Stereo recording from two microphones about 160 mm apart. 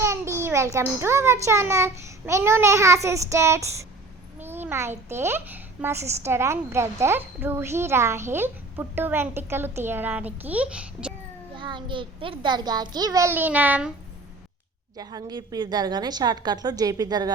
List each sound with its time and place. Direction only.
0.0 s a child's voice: 15° right (ahead or behind)
11.5 s a child's voice: 30° right (ahead or behind); by 13.9 s 10° right (ahead or behind)
14.9 s a child's voice: 25° right (ahead or behind)